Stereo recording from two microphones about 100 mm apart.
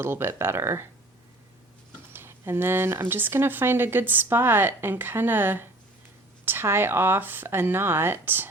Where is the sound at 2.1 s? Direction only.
25° right (ahead or behind).